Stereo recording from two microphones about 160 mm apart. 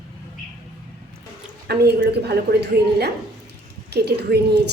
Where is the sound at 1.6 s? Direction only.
85° right.